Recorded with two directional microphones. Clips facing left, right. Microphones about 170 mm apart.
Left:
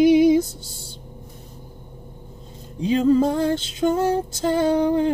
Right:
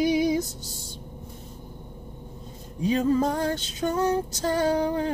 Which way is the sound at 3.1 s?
25° left (ahead or behind).